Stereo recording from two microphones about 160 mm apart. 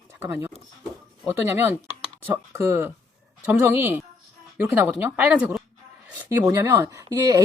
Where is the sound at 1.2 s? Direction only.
15° right (ahead or behind).